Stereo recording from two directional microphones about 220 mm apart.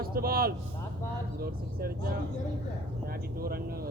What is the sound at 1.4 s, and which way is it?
Speech, 45° right (ahead or behind).